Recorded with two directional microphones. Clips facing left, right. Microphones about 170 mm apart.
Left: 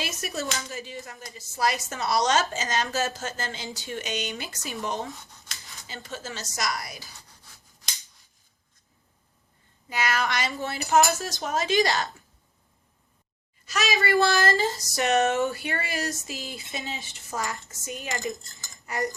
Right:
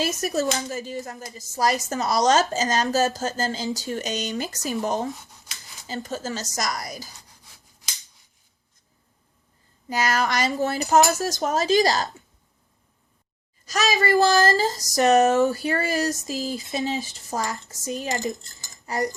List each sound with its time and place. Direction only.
0.0 s speech: 40° right (ahead or behind)
9.9 s speech: 40° right (ahead or behind)
13.7 s speech: 40° right (ahead or behind)